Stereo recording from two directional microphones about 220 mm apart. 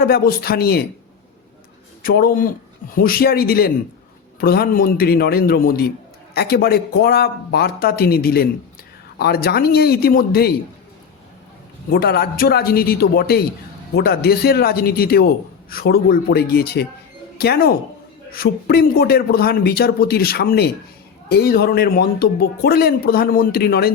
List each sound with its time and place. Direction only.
0.0 s speech: 45° left (ahead or behind)
2.0 s speech: 40° left (ahead or behind)
11.9 s speech: 45° left (ahead or behind)